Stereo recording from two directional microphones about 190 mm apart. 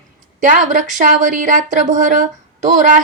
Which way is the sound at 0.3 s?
40° right (ahead or behind).